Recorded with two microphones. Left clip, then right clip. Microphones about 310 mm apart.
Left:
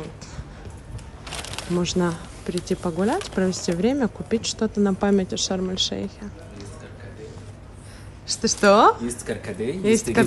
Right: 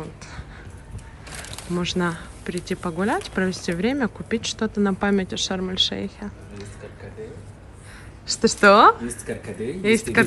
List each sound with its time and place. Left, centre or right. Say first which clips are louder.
1.8 s speech: even; centre
8.3 s a woman's voice: right 2 dB; centre